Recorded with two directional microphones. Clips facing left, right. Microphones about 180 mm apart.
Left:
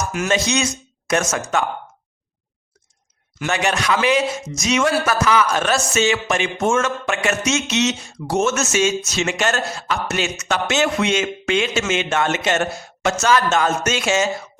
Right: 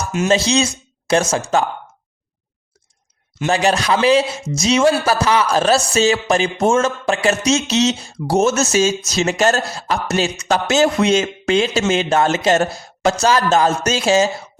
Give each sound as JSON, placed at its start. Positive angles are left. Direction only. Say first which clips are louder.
{"t": 0.1, "sound": "speech", "louder": "right 7 dB", "side_deg": -25}
{"t": 3.3, "sound": "speech", "louder": "right 5 dB", "side_deg": -30}